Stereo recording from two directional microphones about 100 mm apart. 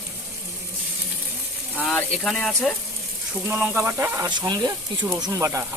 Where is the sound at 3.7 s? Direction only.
25° right (ahead or behind).